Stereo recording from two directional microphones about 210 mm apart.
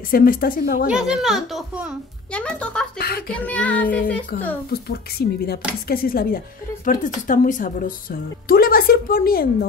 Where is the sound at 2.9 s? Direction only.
45° left (ahead or behind).